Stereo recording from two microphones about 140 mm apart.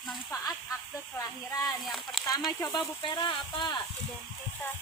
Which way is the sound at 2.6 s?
30° left (ahead or behind).